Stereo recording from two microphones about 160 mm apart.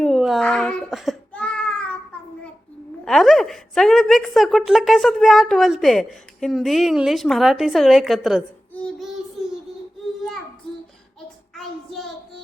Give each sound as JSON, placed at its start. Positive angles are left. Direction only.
{"t": 0.0, "sound": "a child's voice", "side_deg": 0}
{"t": 1.3, "sound": "baby cry", "side_deg": 10}
{"t": 3.0, "sound": "a woman's voice", "side_deg": 0}
{"t": 8.7, "sound": "child singing", "side_deg": 0}
{"t": 11.5, "sound": "child singing", "side_deg": 0}